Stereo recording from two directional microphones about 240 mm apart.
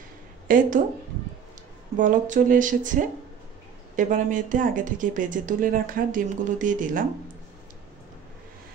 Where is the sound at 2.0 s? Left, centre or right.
Right.